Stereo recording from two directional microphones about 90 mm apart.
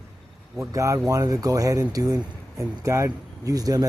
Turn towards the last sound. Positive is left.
turn(degrees=-40)  # may be behind; listen again after turning